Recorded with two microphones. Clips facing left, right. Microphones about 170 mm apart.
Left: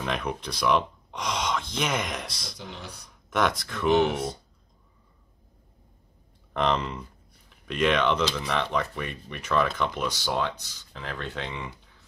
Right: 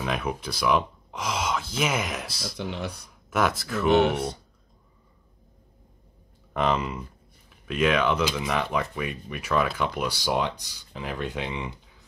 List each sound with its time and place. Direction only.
0.0 s speech: 5° right (ahead or behind)
2.5 s speech: 70° right (ahead or behind)
3.1 s speech: 5° right (ahead or behind)
6.5 s speech: 5° right (ahead or behind)